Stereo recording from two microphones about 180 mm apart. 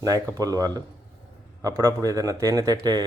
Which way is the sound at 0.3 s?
20° right (ahead or behind).